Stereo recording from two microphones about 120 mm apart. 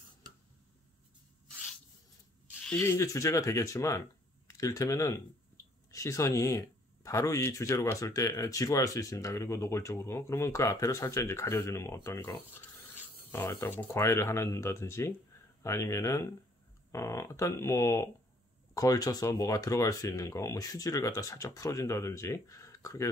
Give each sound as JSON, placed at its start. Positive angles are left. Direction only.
{"t": 2.8, "sound": "speech", "side_deg": 25}